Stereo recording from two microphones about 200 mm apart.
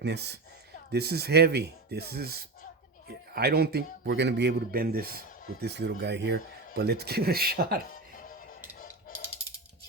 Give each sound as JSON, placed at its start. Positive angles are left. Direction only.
{"t": 0.0, "sound": "a man's voice", "side_deg": -55}